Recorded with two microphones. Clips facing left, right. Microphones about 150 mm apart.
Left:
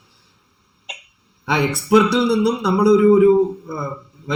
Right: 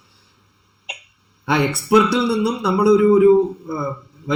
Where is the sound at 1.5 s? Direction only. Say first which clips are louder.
Even; centre (ahead or behind).